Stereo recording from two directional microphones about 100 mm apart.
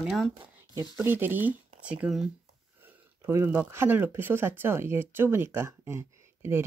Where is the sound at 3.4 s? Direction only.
20° right (ahead or behind).